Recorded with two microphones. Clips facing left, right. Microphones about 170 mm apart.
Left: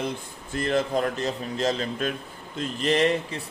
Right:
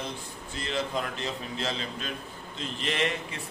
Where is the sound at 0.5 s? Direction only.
50° left (ahead or behind).